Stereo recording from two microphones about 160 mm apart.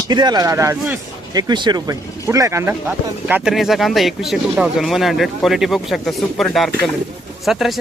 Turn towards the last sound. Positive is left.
turn(degrees=0)  # may be behind; listen again after turning